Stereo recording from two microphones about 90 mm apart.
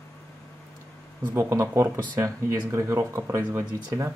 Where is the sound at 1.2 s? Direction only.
30° right (ahead or behind).